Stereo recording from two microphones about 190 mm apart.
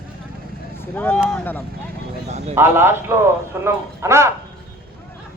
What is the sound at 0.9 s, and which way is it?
Speech, 10° left (ahead or behind).